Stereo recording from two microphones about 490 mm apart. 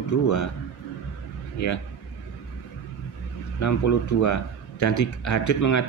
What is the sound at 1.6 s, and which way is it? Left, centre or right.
Speech, left.